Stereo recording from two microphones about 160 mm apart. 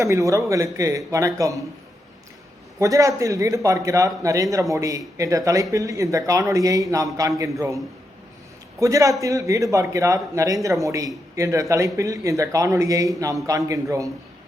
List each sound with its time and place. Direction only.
0.0 s speech: 20° right (ahead or behind)
2.7 s speech: 20° right (ahead or behind)
8.8 s speech: 20° right (ahead or behind)